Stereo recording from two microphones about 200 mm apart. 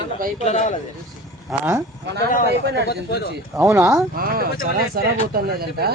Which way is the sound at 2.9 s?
55° left (ahead or behind).